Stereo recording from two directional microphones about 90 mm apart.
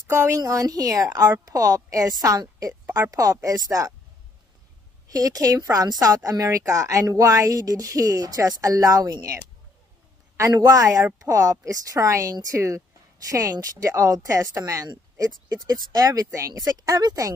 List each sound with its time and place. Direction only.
0.1 s speech: 30° right (ahead or behind)
0.4 s a woman's voice: 40° right (ahead or behind)
5.0 s speech: 40° right (ahead or behind)